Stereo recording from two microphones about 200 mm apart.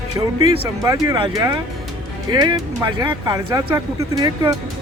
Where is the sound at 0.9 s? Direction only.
20° right (ahead or behind).